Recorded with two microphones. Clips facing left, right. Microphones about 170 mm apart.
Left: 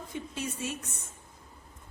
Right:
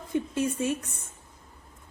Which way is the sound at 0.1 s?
50° right (ahead or behind).